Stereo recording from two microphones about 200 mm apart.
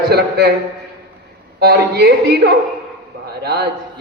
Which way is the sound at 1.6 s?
55° right (ahead or behind).